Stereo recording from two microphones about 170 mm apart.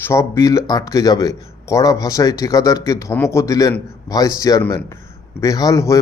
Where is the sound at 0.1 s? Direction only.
15° left (ahead or behind).